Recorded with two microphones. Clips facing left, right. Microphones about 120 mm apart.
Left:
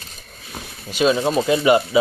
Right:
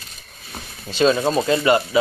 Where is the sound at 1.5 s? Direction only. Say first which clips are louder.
Left 3 dB; 15° left (ahead or behind).